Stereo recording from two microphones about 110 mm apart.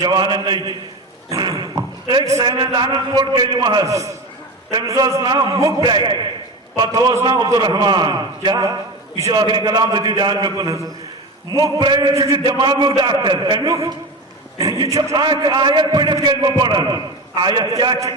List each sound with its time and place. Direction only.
0.0 s a man's voice: 40° right (ahead or behind)
1.3 s a sound: 35° right (ahead or behind)
2.4 s a man's voice: 45° right (ahead or behind)
3.8 s a man's voice: 30° right (ahead or behind)
9.4 s a man's voice: 40° right (ahead or behind)
12.1 s a man's voice: 30° right (ahead or behind)
12.5 s a man's voice: 45° right (ahead or behind)
15.1 s a man's voice: 45° right (ahead or behind)